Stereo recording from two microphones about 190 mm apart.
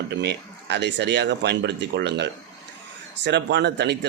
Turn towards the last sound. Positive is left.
turn(degrees=-65)  # may be behind; listen again after turning